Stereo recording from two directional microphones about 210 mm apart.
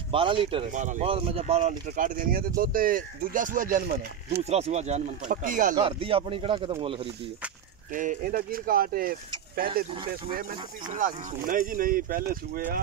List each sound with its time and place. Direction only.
0.1 s speech: 25° right (ahead or behind)
0.7 s speech: 35° right (ahead or behind)
4.5 s speech: 30° right (ahead or behind)
5.8 s speech: 25° right (ahead or behind)
7.9 s speech: 40° right (ahead or behind)
10.9 s speech: 35° right (ahead or behind)